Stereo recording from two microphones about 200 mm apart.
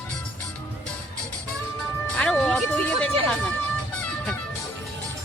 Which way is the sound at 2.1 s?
5° left (ahead or behind).